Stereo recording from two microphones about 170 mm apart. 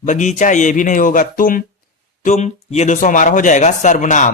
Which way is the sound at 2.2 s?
45° left (ahead or behind).